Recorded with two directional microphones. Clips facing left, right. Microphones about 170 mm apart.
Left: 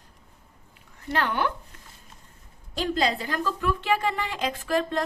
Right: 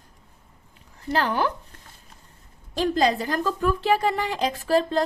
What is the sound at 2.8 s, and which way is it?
A woman's voice, 40° right (ahead or behind).